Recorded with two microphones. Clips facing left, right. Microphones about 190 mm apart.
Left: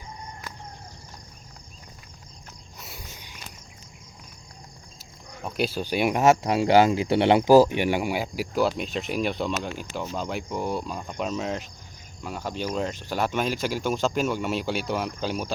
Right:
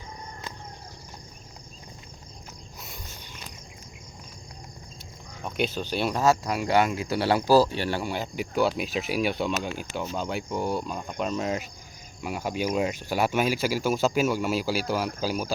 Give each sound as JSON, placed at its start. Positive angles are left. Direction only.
{"t": 5.4, "sound": "speech", "side_deg": 0}